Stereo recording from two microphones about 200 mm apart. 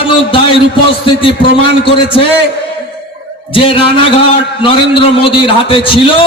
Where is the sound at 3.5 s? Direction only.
25° left (ahead or behind).